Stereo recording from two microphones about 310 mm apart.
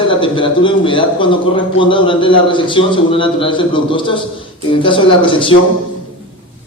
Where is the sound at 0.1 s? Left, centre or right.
Centre.